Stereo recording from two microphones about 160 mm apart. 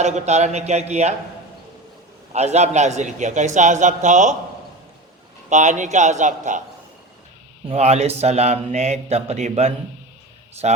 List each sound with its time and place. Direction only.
0.0 s speech: 45° right (ahead or behind)
2.3 s speech: 45° right (ahead or behind)
5.5 s speech: 50° right (ahead or behind)
7.7 s speech: 40° right (ahead or behind)